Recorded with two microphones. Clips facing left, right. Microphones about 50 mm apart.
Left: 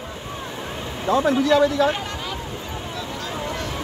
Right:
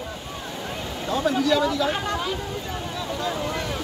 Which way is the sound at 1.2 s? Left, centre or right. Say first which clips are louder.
Left 3 dB; left.